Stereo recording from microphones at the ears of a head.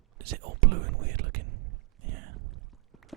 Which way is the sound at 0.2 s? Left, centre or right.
Right.